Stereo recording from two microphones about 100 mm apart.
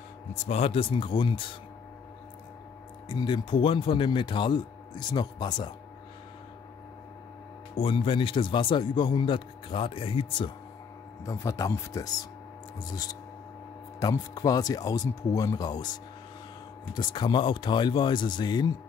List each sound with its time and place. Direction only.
0.5 s a man's voice: 80° left; by 1.6 s 60° left (ahead or behind)
3.1 s speech: 55° left (ahead or behind)
7.7 s a man's voice: 70° left (ahead or behind)
11.2 s speech: 35° left (ahead or behind)
16.9 s speech: 45° left (ahead or behind)